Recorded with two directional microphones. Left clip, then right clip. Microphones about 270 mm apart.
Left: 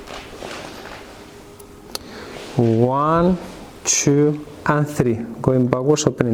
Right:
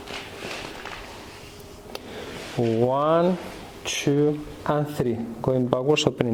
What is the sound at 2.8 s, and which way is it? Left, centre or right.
A woman's voice, left.